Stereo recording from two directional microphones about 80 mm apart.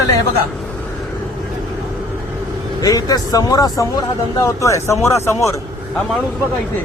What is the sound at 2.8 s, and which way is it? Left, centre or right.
Speech, left.